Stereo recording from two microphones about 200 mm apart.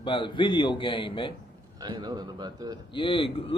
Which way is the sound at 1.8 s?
20° right (ahead or behind).